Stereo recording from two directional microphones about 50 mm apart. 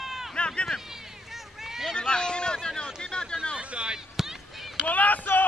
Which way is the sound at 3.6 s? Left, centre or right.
Right.